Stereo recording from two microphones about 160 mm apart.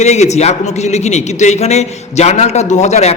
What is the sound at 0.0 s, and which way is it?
A man's voice, 45° left (ahead or behind).